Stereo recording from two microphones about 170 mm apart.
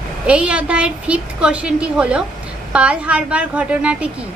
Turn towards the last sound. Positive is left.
turn(degrees=-5)  # may be behind; listen again after turning